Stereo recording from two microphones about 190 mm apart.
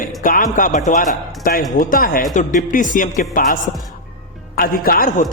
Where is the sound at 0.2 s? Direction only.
45° left (ahead or behind).